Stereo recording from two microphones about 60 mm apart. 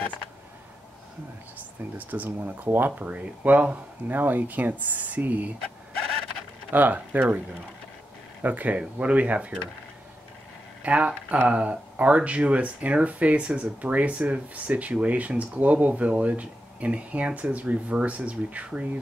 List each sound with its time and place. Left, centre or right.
2.0 s speech: right
6.7 s speech: right
8.4 s speech: right
10.8 s speech: right